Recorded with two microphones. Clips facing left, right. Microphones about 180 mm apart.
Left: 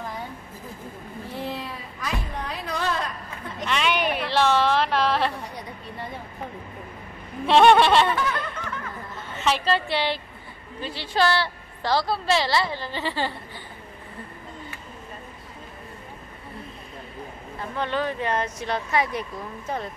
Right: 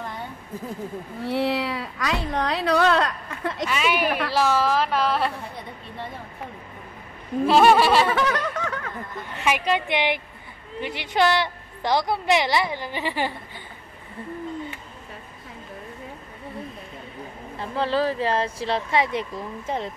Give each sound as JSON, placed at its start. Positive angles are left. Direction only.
{"t": 1.2, "sound": "speech", "side_deg": -85}
{"t": 3.6, "sound": "a woman's voice", "side_deg": -5}
{"t": 7.4, "sound": "a woman's voice", "side_deg": -5}
{"t": 8.1, "sound": "snicker", "side_deg": -80}
{"t": 9.1, "sound": "a woman's voice", "side_deg": -15}
{"t": 17.6, "sound": "speech", "side_deg": -30}